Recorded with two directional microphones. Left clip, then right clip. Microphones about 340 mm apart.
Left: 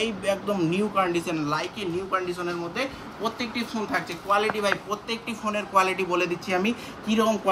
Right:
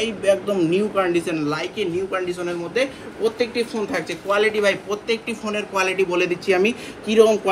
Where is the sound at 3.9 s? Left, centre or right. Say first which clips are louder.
Right 3 dB; centre.